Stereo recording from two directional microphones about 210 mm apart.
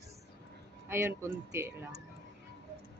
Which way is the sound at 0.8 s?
10° right (ahead or behind).